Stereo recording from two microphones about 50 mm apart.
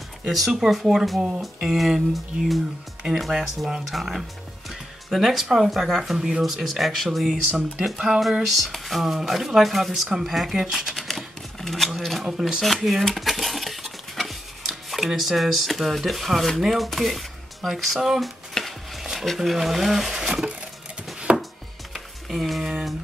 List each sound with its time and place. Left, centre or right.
0.7 s speech: centre
11.1 s typewriter: centre
12.0 s speech: centre
12.3 s speech: centre
12.7 s stir: centre
15.1 s speech: centre
18.5 s stir: centre
19.2 s speech: centre
21.3 s chopping: right
21.9 s music: centre
22.6 s a sound: centre